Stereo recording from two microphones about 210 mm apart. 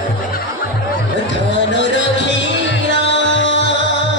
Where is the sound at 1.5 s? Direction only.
60° left (ahead or behind).